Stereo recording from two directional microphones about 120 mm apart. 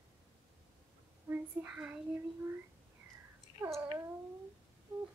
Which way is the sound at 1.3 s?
15° right (ahead or behind).